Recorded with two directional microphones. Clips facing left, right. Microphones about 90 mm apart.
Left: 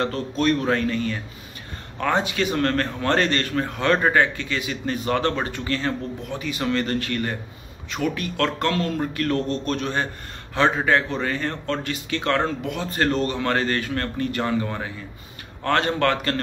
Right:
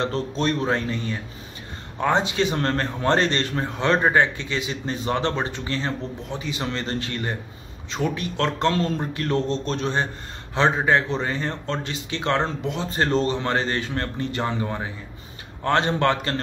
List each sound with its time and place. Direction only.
0.0 s a man's voice: 25° right (ahead or behind)